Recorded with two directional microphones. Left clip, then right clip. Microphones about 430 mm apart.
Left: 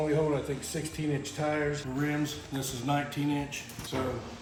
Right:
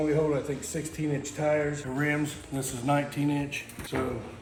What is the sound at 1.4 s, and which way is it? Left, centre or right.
Speech, left.